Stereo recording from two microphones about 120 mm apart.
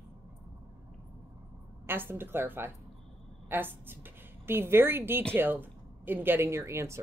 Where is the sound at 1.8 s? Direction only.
20° right (ahead or behind).